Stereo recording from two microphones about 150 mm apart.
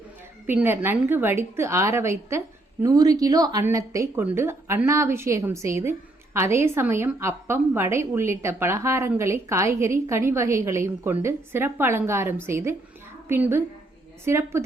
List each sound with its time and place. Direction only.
0.4 s a woman's voice: 15° right (ahead or behind)